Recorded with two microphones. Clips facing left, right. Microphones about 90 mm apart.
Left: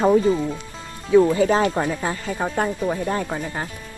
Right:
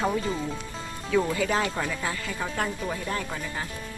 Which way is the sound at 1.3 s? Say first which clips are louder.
Left 8 dB; 30° left (ahead or behind).